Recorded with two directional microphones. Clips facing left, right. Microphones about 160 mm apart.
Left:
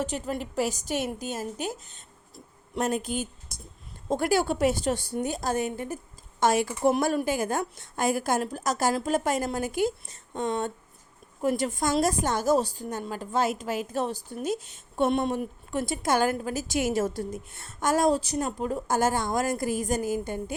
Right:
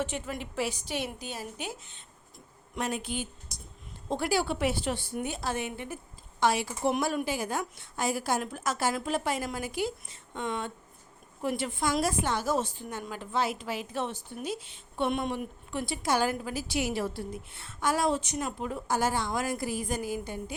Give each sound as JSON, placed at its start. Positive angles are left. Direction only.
{"t": 0.0, "sound": "a woman's voice", "side_deg": 40}